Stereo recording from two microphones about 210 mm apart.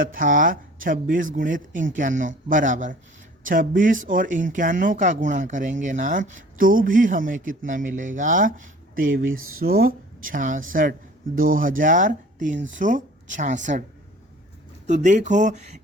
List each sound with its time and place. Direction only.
0.0 s speech: 40° right (ahead or behind)
9.3 s speech: 80° right
9.6 s speech: 45° right (ahead or behind)
14.8 s speech: 35° right (ahead or behind)